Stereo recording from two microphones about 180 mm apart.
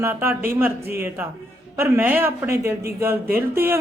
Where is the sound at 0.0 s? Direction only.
15° right (ahead or behind).